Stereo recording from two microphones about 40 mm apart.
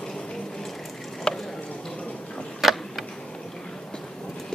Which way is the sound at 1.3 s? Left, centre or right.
Centre.